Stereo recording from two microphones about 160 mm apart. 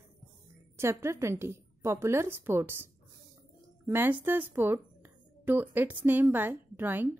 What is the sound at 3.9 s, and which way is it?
Speech, 15° right (ahead or behind).